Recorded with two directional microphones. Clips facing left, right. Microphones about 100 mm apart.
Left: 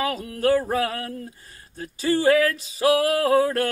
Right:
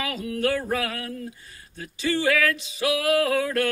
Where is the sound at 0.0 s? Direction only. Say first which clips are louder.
Left 3 dB; 40° left (ahead or behind).